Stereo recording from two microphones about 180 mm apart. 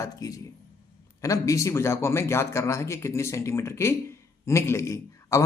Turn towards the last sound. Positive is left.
turn(degrees=15)  # may be behind; listen again after turning